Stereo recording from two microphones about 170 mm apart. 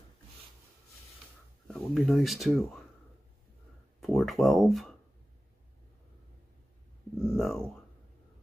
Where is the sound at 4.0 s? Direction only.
Centre (ahead or behind).